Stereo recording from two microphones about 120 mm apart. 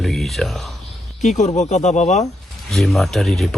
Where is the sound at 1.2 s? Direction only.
80° left.